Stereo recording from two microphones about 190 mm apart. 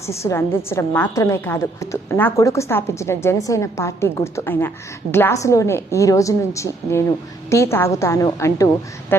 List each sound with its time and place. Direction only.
0.0 s a woman's voice: 15° left (ahead or behind)